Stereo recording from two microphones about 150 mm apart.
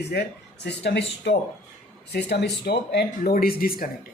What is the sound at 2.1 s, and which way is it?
Speech, 90° left.